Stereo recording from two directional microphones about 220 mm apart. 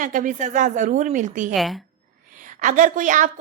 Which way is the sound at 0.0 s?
40° right (ahead or behind).